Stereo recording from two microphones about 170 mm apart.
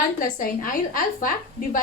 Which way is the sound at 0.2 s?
55° left (ahead or behind).